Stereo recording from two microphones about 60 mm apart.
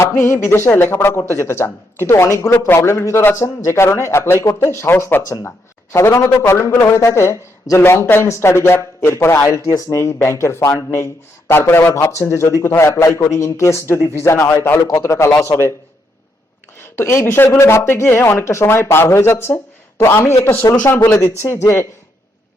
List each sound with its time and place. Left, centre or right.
0.0 s speech: left
9.5 s speech: left
12.1 s speech: left
12.9 s speech: left
16.7 s speech: left
21.6 s speech: left